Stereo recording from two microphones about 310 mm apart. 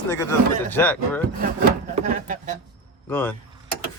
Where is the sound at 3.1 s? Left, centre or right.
Centre.